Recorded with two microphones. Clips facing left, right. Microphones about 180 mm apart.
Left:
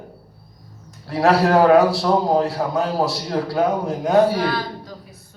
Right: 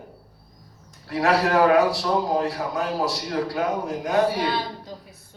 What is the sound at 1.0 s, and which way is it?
A man's voice, 30° left (ahead or behind).